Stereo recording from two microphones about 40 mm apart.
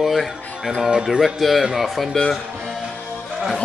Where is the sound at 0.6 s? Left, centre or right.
Centre.